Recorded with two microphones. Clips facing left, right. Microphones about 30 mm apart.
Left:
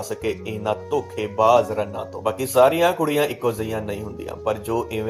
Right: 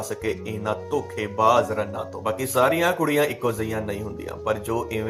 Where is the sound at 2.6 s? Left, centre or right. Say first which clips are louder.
Left 3 dB; left.